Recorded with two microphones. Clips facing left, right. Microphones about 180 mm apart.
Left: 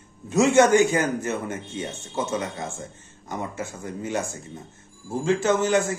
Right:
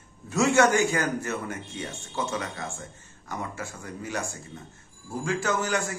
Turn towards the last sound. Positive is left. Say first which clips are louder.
# left 6 dB
turn(degrees=25)  # may be behind; listen again after turning